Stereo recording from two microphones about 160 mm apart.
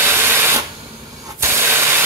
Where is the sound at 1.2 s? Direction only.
15° right (ahead or behind).